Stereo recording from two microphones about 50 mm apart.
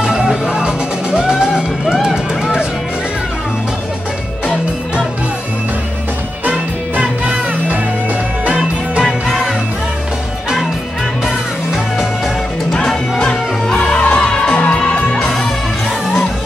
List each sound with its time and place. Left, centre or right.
0.0 s music: centre
7.2 s music: right
8.5 s music: centre
11.2 s music: centre
12.8 s music: centre